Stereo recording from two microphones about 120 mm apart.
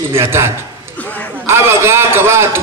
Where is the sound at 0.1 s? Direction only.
20° right (ahead or behind).